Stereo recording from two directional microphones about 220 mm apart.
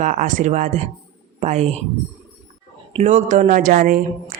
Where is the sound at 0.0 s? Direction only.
35° right (ahead or behind).